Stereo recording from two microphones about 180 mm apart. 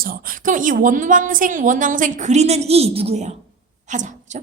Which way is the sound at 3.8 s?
45° right (ahead or behind).